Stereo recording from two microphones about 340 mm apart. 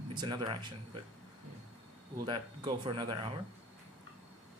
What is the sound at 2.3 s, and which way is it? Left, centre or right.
Speech, centre.